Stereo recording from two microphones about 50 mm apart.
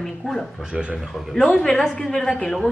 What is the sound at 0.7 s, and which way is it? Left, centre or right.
Speech, right.